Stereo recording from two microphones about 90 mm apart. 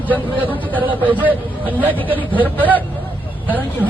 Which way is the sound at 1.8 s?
20° left (ahead or behind).